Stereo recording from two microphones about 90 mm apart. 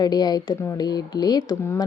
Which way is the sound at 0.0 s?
50° left (ahead or behind).